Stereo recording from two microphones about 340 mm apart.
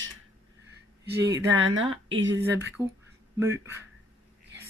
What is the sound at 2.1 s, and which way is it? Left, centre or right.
Speech, right.